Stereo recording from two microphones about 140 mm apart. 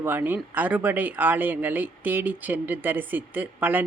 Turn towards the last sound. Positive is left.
turn(degrees=-15)  # may be behind; listen again after turning